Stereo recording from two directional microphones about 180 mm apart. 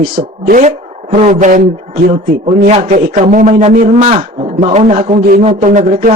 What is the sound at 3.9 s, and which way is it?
A man's voice, 40° right (ahead or behind).